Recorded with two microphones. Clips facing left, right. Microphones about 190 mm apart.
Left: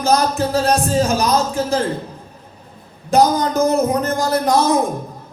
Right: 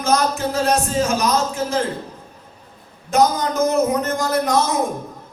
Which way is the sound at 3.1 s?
35° left (ahead or behind).